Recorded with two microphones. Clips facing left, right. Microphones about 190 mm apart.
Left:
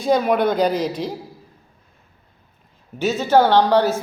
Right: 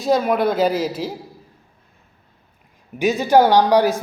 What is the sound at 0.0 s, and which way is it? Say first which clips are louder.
Speech: even; centre (ahead or behind).